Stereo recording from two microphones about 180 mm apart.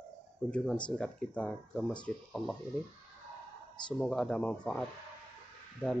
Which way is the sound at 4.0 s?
5° left (ahead or behind).